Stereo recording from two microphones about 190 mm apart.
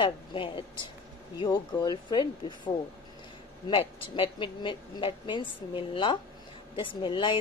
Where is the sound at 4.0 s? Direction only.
25° left (ahead or behind).